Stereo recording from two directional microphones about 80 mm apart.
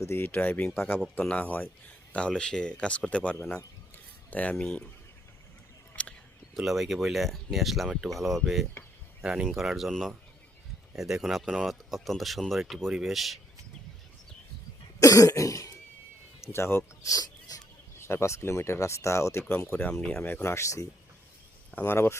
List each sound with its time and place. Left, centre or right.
0.0 s speech: left
4.5 s speech: centre
6.0 s a sound: centre
6.5 s speech: centre
15.0 s cough: left
16.4 s speech: left
17.1 s a sound: left
18.0 s speech: left
19.7 s speech: centre
20.2 s speech: left
21.7 s speech: left